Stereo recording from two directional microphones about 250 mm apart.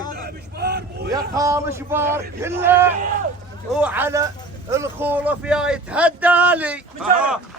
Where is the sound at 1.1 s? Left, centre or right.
Centre.